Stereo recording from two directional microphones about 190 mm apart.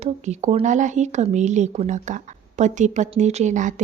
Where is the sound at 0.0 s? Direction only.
35° right (ahead or behind).